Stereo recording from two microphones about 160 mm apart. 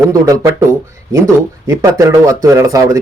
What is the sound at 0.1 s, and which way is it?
Speech, 20° right (ahead or behind).